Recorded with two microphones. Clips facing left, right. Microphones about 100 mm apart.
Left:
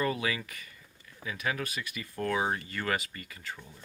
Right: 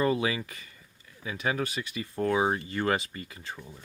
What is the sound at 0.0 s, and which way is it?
Speech, 25° right (ahead or behind).